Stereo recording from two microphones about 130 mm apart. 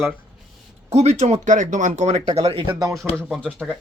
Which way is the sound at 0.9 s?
60° right (ahead or behind).